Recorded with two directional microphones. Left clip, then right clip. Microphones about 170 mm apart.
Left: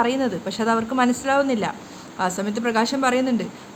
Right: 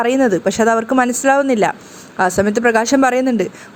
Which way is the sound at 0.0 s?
35° right (ahead or behind).